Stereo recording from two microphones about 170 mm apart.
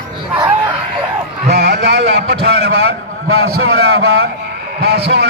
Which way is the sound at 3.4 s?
35° left (ahead or behind).